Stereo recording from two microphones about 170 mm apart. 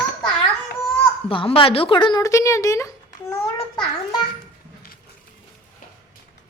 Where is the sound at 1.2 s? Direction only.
30° left (ahead or behind).